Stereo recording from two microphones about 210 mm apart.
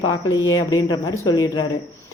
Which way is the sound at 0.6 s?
20° left (ahead or behind).